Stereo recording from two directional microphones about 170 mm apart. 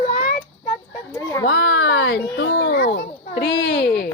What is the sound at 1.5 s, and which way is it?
Speech, 90° left.